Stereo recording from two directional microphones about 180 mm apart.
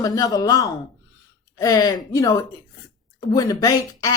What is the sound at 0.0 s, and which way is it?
Speech, 20° left (ahead or behind).